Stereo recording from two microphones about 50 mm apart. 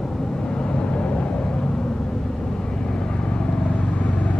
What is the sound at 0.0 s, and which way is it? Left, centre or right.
Vehicle, centre.